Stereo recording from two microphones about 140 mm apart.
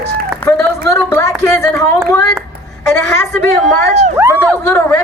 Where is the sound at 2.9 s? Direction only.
15° left (ahead or behind).